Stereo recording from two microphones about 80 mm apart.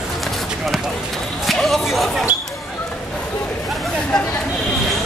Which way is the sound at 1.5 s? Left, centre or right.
Centre.